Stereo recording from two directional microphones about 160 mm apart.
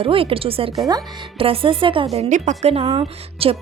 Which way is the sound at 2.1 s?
50° right (ahead or behind).